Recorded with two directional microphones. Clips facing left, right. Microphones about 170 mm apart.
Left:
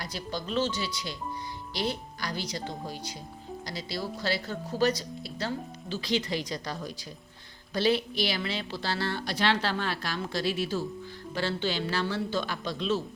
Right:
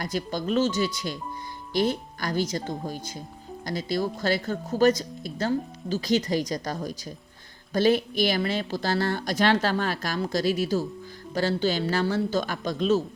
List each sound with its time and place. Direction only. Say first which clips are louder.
0.0 s speech: right 7 dB; 50° right (ahead or behind)